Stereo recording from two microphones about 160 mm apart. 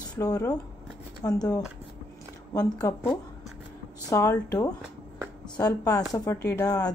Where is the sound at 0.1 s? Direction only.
20° left (ahead or behind).